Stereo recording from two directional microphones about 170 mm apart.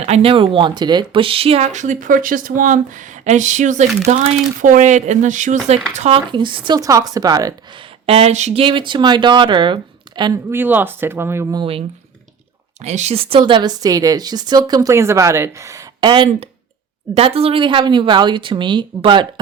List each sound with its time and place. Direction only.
0.0 s speech: 35° right (ahead or behind)
10.5 s speech: 10° right (ahead or behind)
12.8 s speech: 40° right (ahead or behind)
13.4 s speech: 25° right (ahead or behind)